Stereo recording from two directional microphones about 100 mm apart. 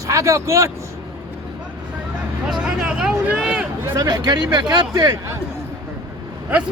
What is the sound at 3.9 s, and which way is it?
Speech, 45° right (ahead or behind).